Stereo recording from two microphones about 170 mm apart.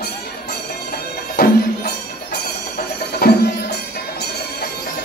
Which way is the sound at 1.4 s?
65° left (ahead or behind).